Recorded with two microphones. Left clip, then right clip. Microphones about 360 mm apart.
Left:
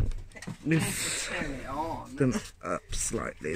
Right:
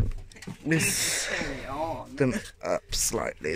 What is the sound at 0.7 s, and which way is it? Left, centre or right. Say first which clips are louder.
Speech: right 4 dB; centre.